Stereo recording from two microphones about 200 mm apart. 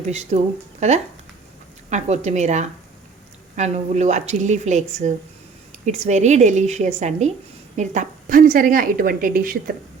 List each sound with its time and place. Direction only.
0.1 s a woman's voice: 35° right (ahead or behind)